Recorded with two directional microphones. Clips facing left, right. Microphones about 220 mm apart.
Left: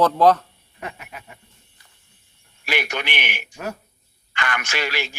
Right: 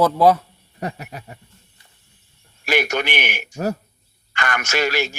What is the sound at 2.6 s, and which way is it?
A man's voice, 45° right (ahead or behind).